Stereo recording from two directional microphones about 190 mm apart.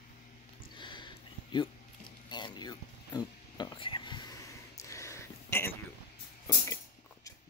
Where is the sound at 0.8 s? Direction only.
25° left (ahead or behind).